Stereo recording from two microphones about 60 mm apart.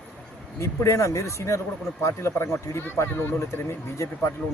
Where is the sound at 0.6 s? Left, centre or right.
Left.